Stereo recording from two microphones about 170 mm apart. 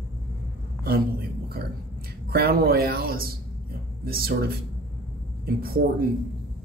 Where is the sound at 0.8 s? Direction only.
65° right (ahead or behind).